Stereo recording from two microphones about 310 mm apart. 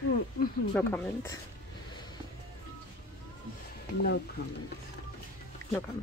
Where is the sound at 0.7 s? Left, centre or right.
Centre.